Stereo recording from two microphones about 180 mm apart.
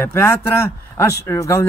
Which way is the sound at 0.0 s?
15° left (ahead or behind).